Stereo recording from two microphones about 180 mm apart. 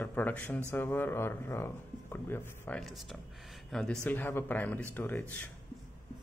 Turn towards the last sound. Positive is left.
turn(degrees=10)  # may be behind; listen again after turning